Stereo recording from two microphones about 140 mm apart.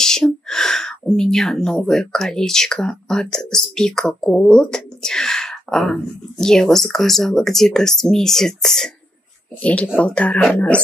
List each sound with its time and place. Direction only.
0.0 s speech: 5° left (ahead or behind)